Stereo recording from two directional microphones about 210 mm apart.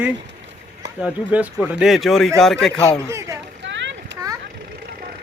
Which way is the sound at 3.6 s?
60° right (ahead or behind).